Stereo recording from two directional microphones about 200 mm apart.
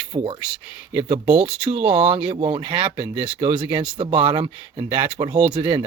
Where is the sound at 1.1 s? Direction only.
30° right (ahead or behind).